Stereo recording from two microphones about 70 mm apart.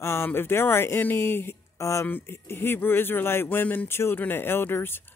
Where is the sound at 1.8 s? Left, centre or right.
Left.